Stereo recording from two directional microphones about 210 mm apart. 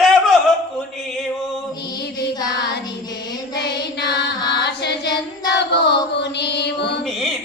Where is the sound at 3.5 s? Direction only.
50° left (ahead or behind).